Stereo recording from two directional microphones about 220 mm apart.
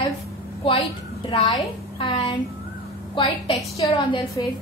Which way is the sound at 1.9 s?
25° left (ahead or behind).